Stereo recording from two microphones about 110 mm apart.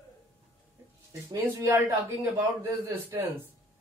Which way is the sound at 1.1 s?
25° right (ahead or behind).